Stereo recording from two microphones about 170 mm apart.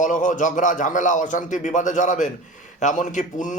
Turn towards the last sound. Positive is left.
turn(degrees=45)  # may be behind; listen again after turning